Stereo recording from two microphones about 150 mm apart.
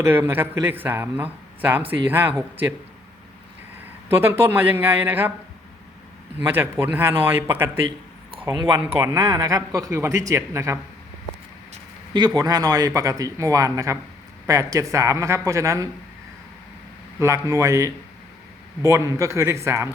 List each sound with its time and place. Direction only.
0.0 s a man's voice: 15° right (ahead or behind)
4.1 s a man's voice: 15° right (ahead or behind)
6.5 s a man's voice: 15° right (ahead or behind)
7.9 s a sound: 35° right (ahead or behind)
9.0 s speech: 20° right (ahead or behind)
12.1 s speech: 25° right (ahead or behind)
17.2 s speech: 20° right (ahead or behind)